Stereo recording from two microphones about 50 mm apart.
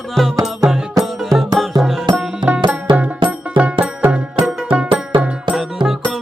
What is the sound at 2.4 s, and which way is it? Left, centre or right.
Music, right.